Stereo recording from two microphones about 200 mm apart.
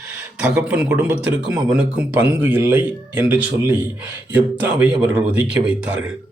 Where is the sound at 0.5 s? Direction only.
5° right (ahead or behind).